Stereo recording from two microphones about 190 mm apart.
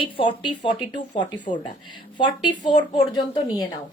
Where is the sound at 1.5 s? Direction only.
50° left (ahead or behind).